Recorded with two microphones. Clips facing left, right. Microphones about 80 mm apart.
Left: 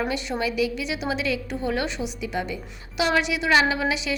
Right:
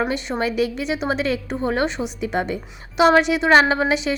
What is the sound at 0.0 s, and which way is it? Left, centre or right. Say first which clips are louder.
A woman's voice: right 4 dB; right.